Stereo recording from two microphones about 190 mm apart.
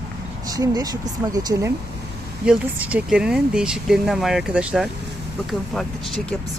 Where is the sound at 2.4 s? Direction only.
5° right (ahead or behind).